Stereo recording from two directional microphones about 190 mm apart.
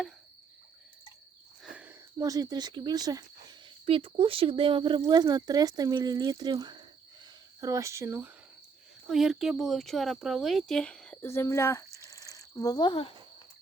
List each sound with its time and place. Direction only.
1.6 s speech: 10° right (ahead or behind)
9.0 s speech: centre (ahead or behind); by 11.9 s 15° left (ahead or behind)
11.9 s a sound: 15° right (ahead or behind)
12.5 s speech: 20° left (ahead or behind)